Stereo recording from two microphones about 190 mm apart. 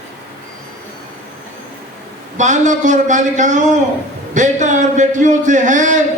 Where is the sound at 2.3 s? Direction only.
40° right (ahead or behind).